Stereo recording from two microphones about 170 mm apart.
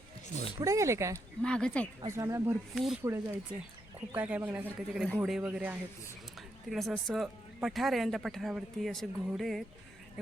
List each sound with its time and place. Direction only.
0.6 s speech: 20° right (ahead or behind)
1.4 s speech: 5° left (ahead or behind)
2.1 s speech: 15° right (ahead or behind)
2.7 s speech: centre (ahead or behind)
3.0 s speech: 15° right (ahead or behind); by 9.6 s centre (ahead or behind)